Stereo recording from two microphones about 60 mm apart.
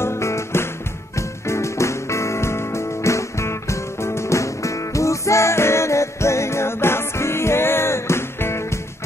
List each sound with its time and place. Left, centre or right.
0.0 s music: left